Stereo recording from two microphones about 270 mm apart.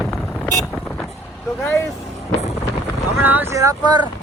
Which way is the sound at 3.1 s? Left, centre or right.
Centre.